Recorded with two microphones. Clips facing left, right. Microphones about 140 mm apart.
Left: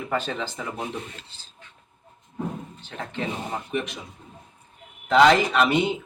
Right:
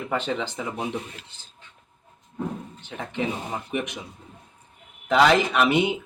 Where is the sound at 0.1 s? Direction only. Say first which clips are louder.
Right 1 dB; 15° right (ahead or behind).